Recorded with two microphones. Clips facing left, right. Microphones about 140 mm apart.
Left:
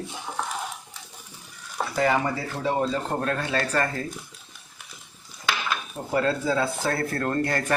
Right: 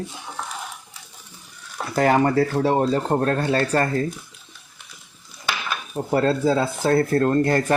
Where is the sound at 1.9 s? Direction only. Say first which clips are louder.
Right 7 dB; 50° right (ahead or behind); by 3.9 s 35° right (ahead or behind).